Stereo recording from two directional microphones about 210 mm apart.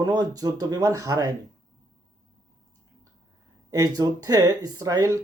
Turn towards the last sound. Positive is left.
turn(degrees=-15)  # may be behind; listen again after turning